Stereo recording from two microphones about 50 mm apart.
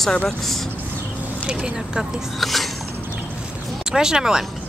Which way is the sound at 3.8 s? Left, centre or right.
Centre.